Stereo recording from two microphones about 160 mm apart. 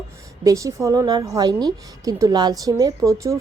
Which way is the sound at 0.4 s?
20° right (ahead or behind).